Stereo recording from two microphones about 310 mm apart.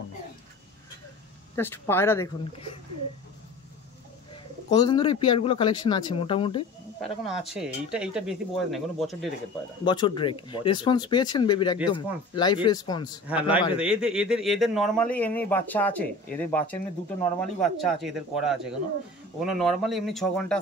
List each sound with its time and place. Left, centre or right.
1.5 s speech: centre
4.6 s speech: centre
7.0 s a man's voice: centre
9.8 s speech: centre
13.3 s a man's voice: centre